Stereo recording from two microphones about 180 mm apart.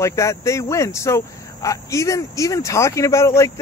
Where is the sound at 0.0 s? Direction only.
15° left (ahead or behind).